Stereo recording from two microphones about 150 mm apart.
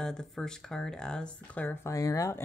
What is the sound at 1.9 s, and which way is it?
Speech, 20° left (ahead or behind).